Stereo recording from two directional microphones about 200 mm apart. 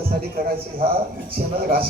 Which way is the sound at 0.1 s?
50° right (ahead or behind).